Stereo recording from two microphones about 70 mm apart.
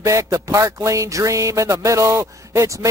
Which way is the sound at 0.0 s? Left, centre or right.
Right.